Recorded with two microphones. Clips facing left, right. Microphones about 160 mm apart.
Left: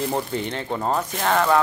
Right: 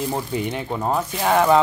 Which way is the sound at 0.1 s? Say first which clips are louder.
Right 1 dB; 10° right (ahead or behind).